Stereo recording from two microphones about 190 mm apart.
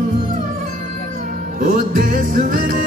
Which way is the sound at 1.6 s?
45° right (ahead or behind).